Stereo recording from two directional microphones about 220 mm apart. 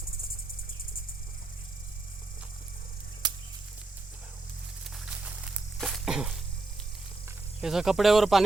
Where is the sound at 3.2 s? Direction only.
20° right (ahead or behind).